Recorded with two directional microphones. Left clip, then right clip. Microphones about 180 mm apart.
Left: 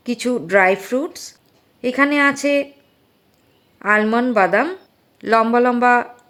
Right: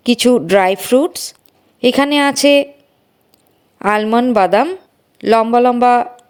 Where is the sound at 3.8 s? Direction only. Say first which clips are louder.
Right 3 dB; 35° right (ahead or behind).